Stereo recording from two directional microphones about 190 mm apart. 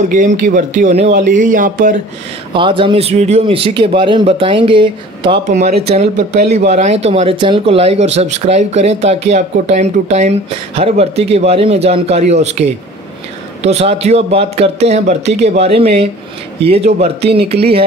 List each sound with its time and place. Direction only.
0.1 s speech: 40° right (ahead or behind)
2.5 s speech: 25° right (ahead or behind)
5.5 s speech: 35° right (ahead or behind)